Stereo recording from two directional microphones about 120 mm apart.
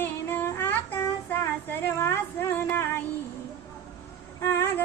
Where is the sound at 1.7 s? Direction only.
20° left (ahead or behind).